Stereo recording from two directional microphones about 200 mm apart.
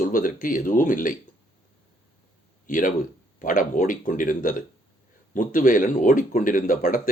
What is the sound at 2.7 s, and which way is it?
Speech, 40° left (ahead or behind).